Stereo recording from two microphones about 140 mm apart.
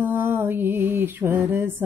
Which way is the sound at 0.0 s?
15° right (ahead or behind).